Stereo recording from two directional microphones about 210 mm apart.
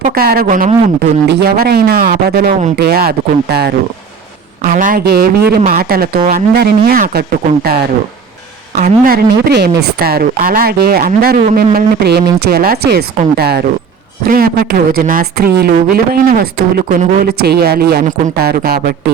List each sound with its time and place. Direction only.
0.0 s speech: 45° right (ahead or behind)